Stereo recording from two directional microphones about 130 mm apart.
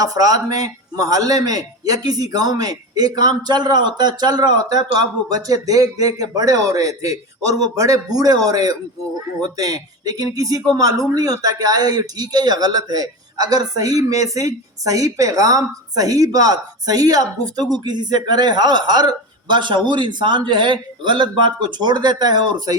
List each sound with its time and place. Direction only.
0.0 s a man's voice: 30° right (ahead or behind)